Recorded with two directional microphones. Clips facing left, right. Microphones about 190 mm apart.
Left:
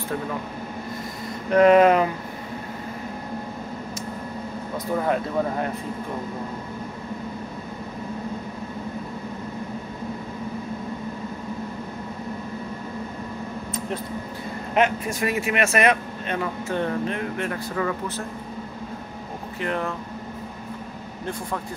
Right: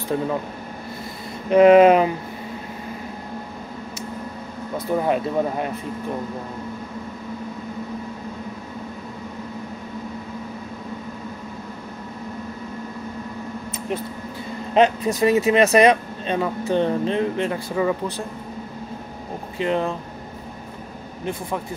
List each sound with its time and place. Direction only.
1.5 s speech: 20° right (ahead or behind)
5.0 s speech: 15° right (ahead or behind)
14.7 s speech: 30° right (ahead or behind)
19.6 s speech: 20° right (ahead or behind)